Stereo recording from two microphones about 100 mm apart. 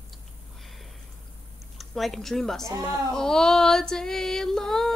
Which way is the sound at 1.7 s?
Centre (ahead or behind).